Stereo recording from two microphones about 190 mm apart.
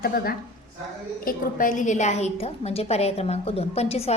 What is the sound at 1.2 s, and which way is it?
A woman's voice, 45° left (ahead or behind).